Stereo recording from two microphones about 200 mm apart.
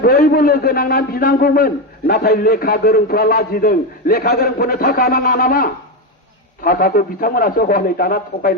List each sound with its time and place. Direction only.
0.0 s a man's voice: 50° left (ahead or behind)